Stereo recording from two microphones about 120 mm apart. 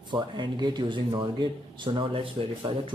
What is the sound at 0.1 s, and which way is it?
Speech, 40° right (ahead or behind).